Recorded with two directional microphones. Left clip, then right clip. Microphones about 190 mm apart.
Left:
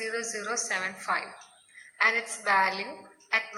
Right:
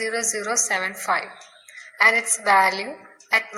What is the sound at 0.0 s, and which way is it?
A woman's voice, 35° right (ahead or behind).